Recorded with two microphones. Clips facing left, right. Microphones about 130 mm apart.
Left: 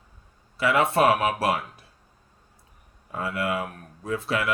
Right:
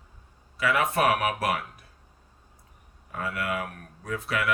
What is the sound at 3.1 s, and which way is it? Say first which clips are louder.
Speech: left 3 dB; 25° left (ahead or behind).